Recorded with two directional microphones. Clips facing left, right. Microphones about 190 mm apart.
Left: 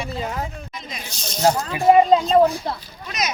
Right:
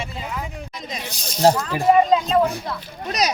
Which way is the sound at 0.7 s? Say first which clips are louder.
Right 3 dB; 40° right (ahead or behind).